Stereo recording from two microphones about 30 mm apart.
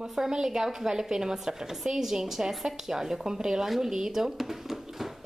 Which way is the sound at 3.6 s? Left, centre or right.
Centre.